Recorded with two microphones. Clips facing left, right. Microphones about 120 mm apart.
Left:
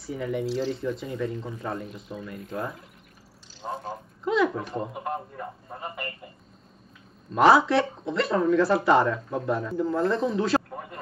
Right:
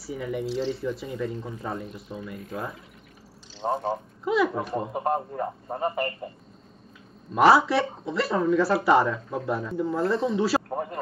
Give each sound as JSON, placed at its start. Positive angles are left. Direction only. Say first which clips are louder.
{"t": 0.0, "sound": "speech", "louder": "left 1 dB", "side_deg": 0}
{"t": 3.6, "sound": "a man's voice", "louder": "right 7 dB", "side_deg": -50}
{"t": 4.2, "sound": "speech", "louder": "left 1 dB", "side_deg": -5}
{"t": 4.9, "sound": "a man's voice", "louder": "right 6 dB", "side_deg": -40}
{"t": 7.3, "sound": "speech", "louder": "even", "side_deg": -5}